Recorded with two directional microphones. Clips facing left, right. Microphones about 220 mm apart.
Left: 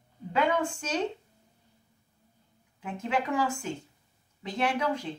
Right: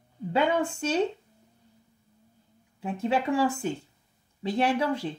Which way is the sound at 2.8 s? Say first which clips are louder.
Right 4 dB; 30° right (ahead or behind).